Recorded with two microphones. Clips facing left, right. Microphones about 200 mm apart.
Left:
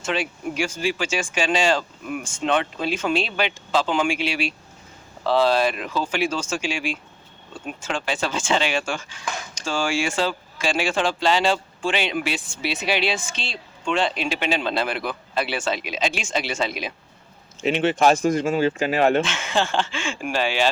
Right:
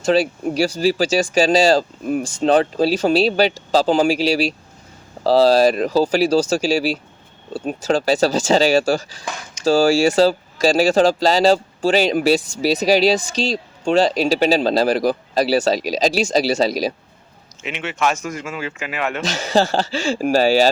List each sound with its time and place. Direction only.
0.0 s speech: 35° right (ahead or behind)
17.6 s speech: 35° left (ahead or behind)
19.2 s speech: 40° right (ahead or behind)